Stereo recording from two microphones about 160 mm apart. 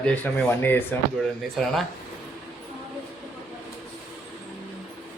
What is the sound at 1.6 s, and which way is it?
Speech, centre (ahead or behind).